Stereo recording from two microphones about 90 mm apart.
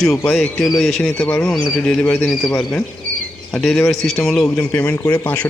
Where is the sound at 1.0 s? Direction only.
15° left (ahead or behind).